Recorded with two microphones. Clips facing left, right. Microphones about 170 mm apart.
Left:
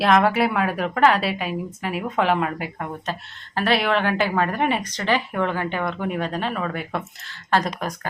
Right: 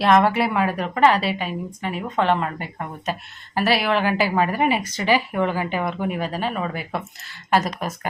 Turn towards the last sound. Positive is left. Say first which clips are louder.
# right 1 dB
turn(degrees=-5)  # may be behind; listen again after turning